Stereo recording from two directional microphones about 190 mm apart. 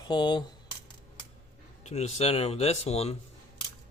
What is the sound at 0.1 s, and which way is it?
Speech, 20° left (ahead or behind).